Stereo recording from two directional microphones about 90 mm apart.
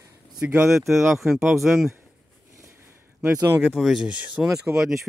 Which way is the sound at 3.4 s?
25° right (ahead or behind).